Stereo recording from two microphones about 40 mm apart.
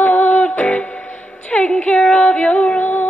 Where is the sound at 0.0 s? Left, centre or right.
Left.